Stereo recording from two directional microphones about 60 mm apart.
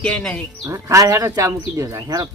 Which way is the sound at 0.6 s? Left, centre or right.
Right.